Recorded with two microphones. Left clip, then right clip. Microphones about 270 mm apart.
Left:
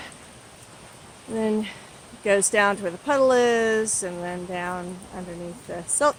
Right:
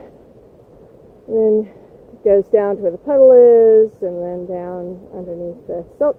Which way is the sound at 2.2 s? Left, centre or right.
Centre.